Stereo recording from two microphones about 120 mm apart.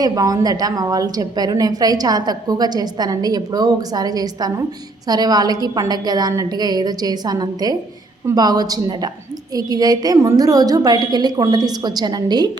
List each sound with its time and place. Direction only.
0.0 s a woman's voice: 30° right (ahead or behind)